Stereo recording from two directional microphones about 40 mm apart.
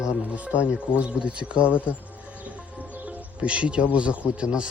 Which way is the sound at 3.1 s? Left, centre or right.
Right.